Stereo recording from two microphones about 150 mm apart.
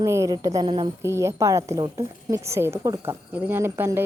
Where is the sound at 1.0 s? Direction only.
20° right (ahead or behind).